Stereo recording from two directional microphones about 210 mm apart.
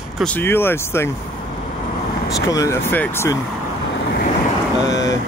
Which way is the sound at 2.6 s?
10° left (ahead or behind).